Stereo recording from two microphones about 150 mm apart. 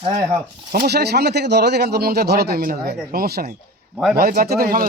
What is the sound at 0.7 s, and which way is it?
Speech, 90° right.